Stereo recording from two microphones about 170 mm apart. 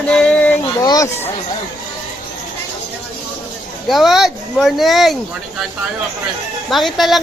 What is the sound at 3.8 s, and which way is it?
A woman's voice, centre (ahead or behind).